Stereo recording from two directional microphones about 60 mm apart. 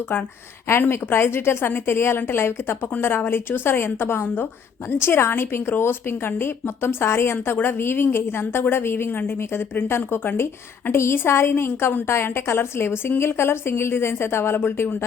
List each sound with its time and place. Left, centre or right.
0.9 s a woman's voice: left